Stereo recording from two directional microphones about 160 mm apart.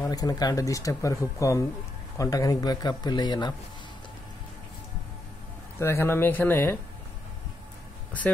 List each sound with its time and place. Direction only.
0.0 s speech: 25° left (ahead or behind)
5.8 s speech: 15° left (ahead or behind)